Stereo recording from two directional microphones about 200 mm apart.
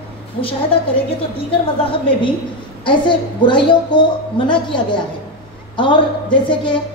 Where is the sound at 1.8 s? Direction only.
25° left (ahead or behind).